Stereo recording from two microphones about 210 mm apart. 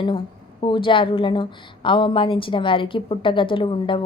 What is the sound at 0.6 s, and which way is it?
A woman's voice, 25° left (ahead or behind).